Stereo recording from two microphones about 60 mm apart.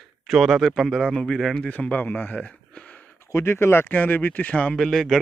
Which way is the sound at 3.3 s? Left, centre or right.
Left.